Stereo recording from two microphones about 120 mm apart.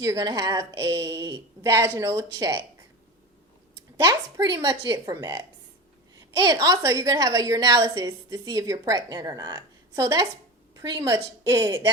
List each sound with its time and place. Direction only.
0.0 s a woman's voice: 25° right (ahead or behind)
3.9 s a woman's voice: 30° right (ahead or behind)
6.3 s a woman's voice: 30° right (ahead or behind)
10.8 s a woman's voice: 35° right (ahead or behind)